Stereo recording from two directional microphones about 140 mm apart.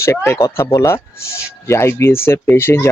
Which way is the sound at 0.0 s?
20° left (ahead or behind).